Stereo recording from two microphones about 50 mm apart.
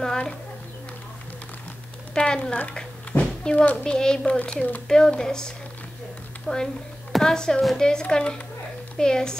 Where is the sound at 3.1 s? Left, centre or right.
Left.